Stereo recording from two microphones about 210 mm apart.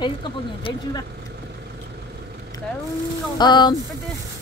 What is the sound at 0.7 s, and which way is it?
Speech, 25° left (ahead or behind).